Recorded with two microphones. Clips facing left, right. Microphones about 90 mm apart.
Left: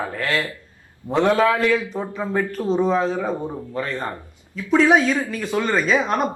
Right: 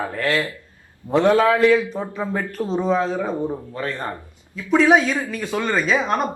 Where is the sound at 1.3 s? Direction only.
25° right (ahead or behind).